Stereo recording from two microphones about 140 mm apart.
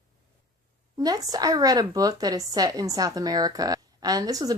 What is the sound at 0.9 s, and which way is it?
A woman's voice, 25° right (ahead or behind).